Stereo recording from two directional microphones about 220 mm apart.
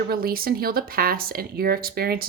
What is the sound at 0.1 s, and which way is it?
Speech, 40° right (ahead or behind).